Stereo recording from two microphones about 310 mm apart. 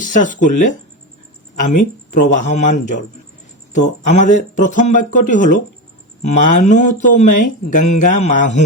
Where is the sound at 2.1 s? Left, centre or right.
Left.